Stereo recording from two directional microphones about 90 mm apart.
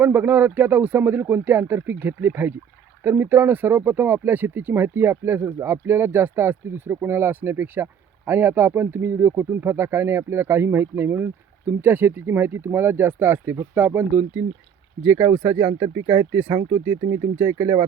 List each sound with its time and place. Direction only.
0.0 s speech: 20° right (ahead or behind)